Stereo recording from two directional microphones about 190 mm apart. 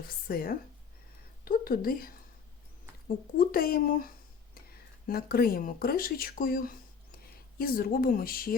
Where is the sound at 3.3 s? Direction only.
50° left (ahead or behind).